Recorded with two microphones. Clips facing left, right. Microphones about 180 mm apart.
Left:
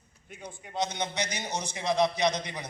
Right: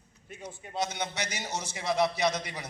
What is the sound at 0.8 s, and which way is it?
A man's voice, 20° left (ahead or behind).